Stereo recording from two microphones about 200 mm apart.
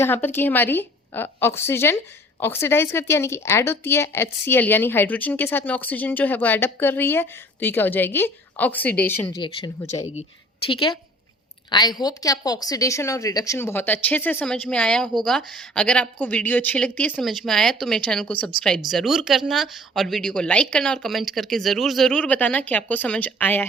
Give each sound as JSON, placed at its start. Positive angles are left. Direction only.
{"t": 0.0, "sound": "speech", "side_deg": 10}
{"t": 9.4, "sound": "a woman's voice", "side_deg": 25}